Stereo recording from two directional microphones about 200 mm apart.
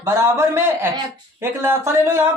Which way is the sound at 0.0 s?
15° right (ahead or behind).